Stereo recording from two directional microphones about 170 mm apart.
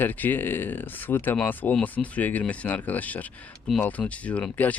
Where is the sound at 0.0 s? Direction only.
10° left (ahead or behind).